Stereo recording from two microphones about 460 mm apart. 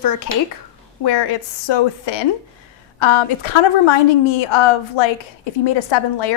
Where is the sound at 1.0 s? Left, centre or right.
Left.